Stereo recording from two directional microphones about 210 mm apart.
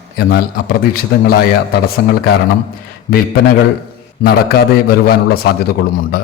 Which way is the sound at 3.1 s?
45° left (ahead or behind).